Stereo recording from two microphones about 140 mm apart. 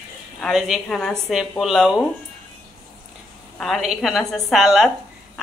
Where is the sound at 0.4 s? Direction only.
5° right (ahead or behind).